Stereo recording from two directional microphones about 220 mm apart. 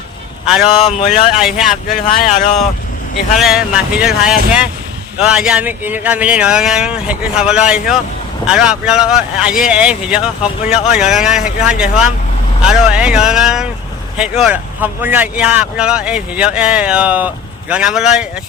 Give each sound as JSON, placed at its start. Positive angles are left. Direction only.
{"t": 0.4, "sound": "a man's voice", "side_deg": -5}
{"t": 0.9, "sound": "speech", "side_deg": 30}
{"t": 1.4, "sound": "speech", "side_deg": 0}
{"t": 3.3, "sound": "speech", "side_deg": 0}